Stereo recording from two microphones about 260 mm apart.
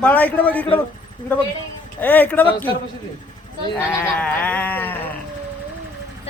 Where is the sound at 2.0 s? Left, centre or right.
Centre.